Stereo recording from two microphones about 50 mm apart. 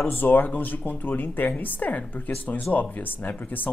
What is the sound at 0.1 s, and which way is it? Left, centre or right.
Speech, left.